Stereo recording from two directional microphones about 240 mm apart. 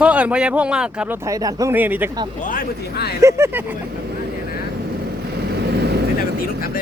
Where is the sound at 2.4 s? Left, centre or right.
Left.